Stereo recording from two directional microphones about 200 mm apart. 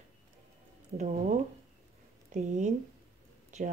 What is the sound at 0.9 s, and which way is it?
A woman's voice, 35° right (ahead or behind).